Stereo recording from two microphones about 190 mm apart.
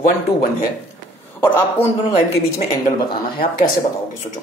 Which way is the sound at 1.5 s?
10° left (ahead or behind).